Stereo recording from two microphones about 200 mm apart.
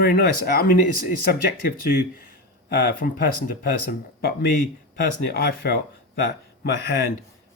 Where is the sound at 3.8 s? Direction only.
50° left (ahead or behind).